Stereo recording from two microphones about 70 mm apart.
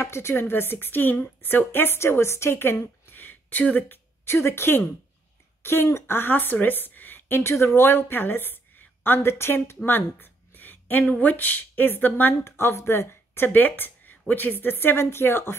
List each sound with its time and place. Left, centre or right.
0.0 s a woman's voice: left